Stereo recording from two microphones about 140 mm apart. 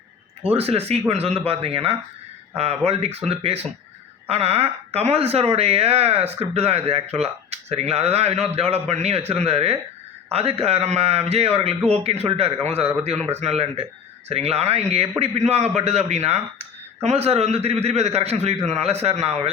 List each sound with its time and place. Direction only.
0.4 s a man's voice: 45° right (ahead or behind)